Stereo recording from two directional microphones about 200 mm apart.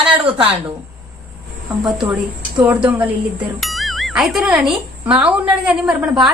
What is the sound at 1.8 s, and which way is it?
Speech, 5° right (ahead or behind).